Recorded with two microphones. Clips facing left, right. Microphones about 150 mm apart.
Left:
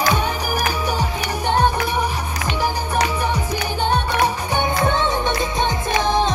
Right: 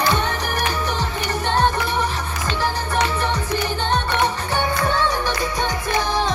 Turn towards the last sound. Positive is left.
turn(degrees=20)  # may be behind; listen again after turning